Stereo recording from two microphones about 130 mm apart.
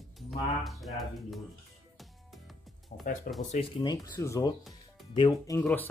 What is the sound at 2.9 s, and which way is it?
Speech, 90° left.